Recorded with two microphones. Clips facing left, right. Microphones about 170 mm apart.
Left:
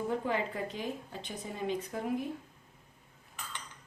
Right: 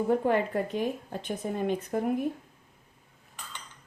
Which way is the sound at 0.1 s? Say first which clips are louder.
Right 8 dB; 55° right (ahead or behind).